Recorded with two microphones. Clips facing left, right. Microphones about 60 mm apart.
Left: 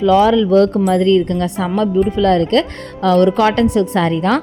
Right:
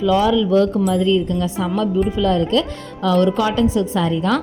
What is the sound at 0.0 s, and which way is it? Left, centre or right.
Speech, left.